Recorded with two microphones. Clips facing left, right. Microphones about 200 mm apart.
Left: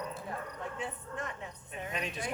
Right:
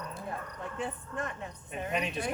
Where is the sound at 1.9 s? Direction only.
60° right (ahead or behind).